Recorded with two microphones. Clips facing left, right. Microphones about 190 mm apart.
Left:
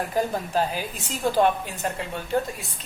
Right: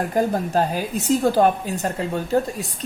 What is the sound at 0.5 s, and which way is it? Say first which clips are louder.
A woman's voice: right 4 dB; 45° right (ahead or behind).